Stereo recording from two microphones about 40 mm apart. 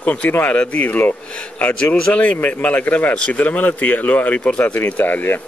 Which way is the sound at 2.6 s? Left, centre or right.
Left.